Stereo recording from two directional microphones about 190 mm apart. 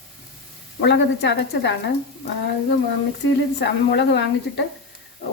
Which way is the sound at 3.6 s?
65° left (ahead or behind).